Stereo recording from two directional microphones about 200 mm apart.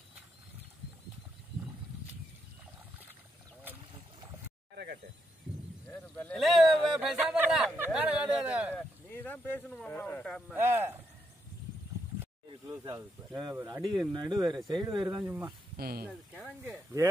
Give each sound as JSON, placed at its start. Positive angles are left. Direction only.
{"t": 5.9, "sound": "speech", "side_deg": 5}
{"t": 6.9, "sound": "a sound", "side_deg": 0}
{"t": 9.1, "sound": "speech", "side_deg": 10}
{"t": 10.5, "sound": "speech", "side_deg": -10}
{"t": 13.4, "sound": "speech", "side_deg": -15}
{"t": 15.7, "sound": "speech", "side_deg": -50}